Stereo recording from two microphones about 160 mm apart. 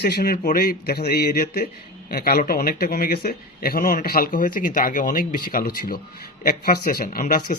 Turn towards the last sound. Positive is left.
turn(degrees=60)  # may be behind; listen again after turning